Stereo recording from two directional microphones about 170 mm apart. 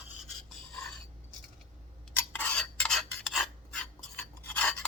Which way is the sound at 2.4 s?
5° left (ahead or behind).